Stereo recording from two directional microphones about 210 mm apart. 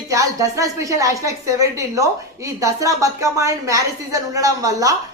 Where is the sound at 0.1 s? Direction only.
15° right (ahead or behind).